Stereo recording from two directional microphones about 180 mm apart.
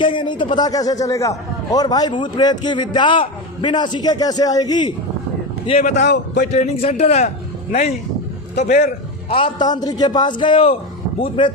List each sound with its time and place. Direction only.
0.0 s a man's voice: 25° left (ahead or behind)
5.6 s a man's voice: 35° left (ahead or behind)
6.0 s a man's voice: 70° left (ahead or behind)
6.5 s a man's voice: 35° left (ahead or behind)
8.5 s a man's voice: 50° left (ahead or behind)
9.3 s a man's voice: 25° left (ahead or behind)